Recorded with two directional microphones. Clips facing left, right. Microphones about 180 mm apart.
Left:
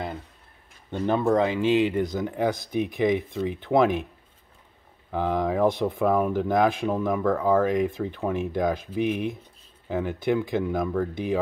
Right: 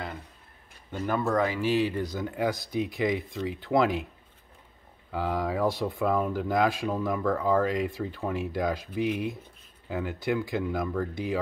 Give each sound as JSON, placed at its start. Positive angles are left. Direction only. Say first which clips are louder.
{"t": 0.9, "sound": "speech", "louder": "left 5 dB", "side_deg": 25}
{"t": 5.1, "sound": "speech", "louder": "left 4 dB", "side_deg": 20}